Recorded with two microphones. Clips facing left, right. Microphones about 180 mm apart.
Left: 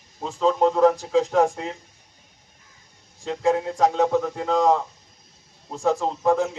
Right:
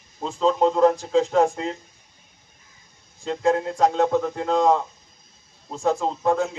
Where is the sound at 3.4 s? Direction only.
5° left (ahead or behind).